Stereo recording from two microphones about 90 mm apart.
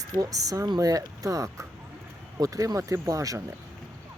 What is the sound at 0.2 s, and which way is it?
Speech, 40° right (ahead or behind).